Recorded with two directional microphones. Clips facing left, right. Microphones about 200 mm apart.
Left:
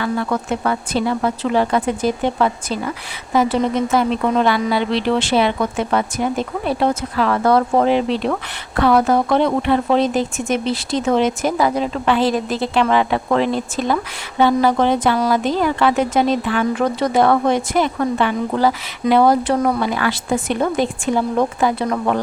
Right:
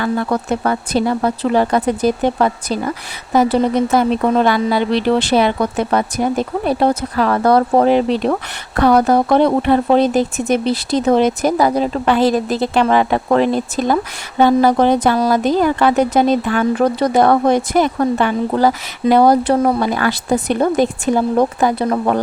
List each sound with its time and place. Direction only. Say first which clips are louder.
0.0 s speech: right 3 dB; 40° right (ahead or behind)
19.8 s speech: right 3 dB; 40° right (ahead or behind)